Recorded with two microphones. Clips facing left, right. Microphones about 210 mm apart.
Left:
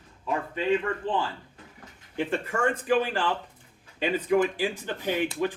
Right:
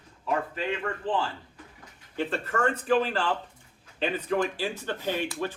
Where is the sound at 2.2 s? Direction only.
10° left (ahead or behind).